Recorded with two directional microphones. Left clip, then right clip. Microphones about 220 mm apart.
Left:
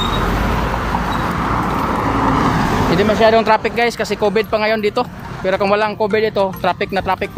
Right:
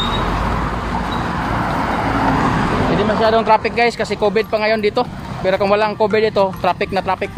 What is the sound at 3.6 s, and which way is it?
Speech, 15° left (ahead or behind).